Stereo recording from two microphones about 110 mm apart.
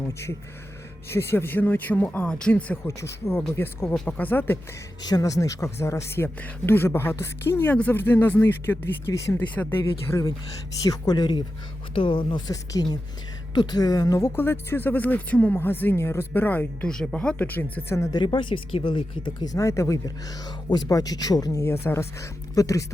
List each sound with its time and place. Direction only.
0.1 s speech: 25° left (ahead or behind)
2.8 s speech: 30° left (ahead or behind)
3.8 s speech: 15° left (ahead or behind)
5.0 s speech: 35° left (ahead or behind)
9.6 s speech: 10° left (ahead or behind)
10.8 s speech: 35° left (ahead or behind)
11.9 s speech: 55° left (ahead or behind)
12.5 s speech: 35° left (ahead or behind)
14.3 s speech: 20° left (ahead or behind)
17.3 s speech: 20° left (ahead or behind)
18.2 s speech: 45° left (ahead or behind)
19.5 s speech: 30° left (ahead or behind)